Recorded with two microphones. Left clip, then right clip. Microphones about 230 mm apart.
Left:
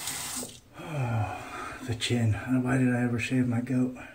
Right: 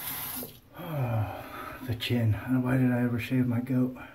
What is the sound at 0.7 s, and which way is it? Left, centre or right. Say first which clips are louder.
Speech: even; centre.